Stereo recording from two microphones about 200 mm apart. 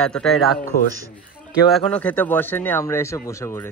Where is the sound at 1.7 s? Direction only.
5° left (ahead or behind).